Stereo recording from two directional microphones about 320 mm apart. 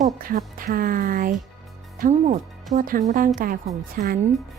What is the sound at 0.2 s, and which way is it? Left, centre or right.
A woman's voice, right.